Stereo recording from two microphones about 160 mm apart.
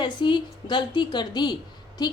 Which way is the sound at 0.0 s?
30° left (ahead or behind).